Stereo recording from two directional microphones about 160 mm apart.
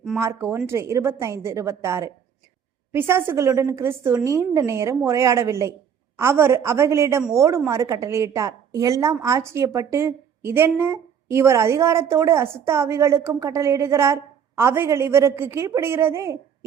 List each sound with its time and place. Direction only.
0.2 s a woman's voice: 15° right (ahead or behind)